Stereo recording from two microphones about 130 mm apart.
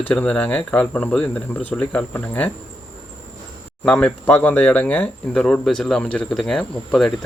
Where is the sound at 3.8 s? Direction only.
10° left (ahead or behind).